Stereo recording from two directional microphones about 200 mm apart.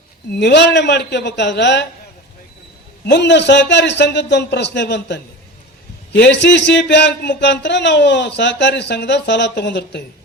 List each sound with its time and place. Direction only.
0.3 s a man's voice: 60° left (ahead or behind)
3.1 s a man's voice: 60° left (ahead or behind)